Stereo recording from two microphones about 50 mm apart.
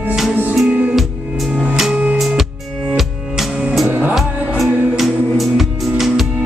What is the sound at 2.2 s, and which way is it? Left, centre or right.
Music, centre.